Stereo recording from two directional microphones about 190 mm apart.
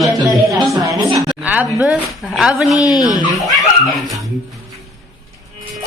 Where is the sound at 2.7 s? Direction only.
20° left (ahead or behind).